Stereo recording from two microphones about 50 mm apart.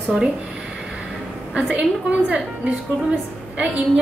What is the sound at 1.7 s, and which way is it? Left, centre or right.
A woman's voice, right.